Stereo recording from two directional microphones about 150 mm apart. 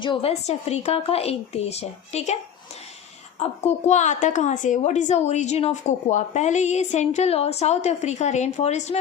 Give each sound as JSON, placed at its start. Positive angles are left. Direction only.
{"t": 0.0, "sound": "a woman's voice", "side_deg": 35}
{"t": 3.4, "sound": "a woman's voice", "side_deg": 45}